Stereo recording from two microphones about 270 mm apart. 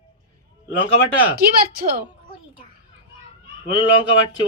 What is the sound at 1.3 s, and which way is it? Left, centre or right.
Speech, right.